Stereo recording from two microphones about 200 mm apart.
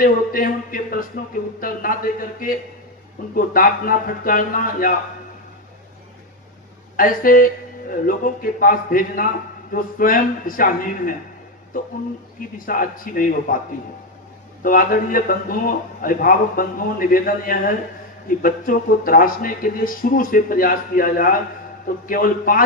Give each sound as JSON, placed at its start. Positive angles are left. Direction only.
{"t": 0.0, "sound": "a man's voice", "side_deg": 45}
{"t": 6.9, "sound": "a man's voice", "side_deg": 45}
{"t": 12.5, "sound": "a man's voice", "side_deg": 45}
{"t": 14.6, "sound": "a man's voice", "side_deg": 45}